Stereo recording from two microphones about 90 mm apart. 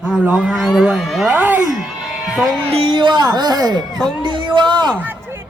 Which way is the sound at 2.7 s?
90° right.